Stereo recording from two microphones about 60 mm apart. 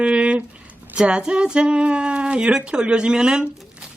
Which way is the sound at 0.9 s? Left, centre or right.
Centre.